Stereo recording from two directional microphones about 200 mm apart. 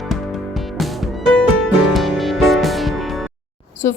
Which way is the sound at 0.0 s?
Centre (ahead or behind).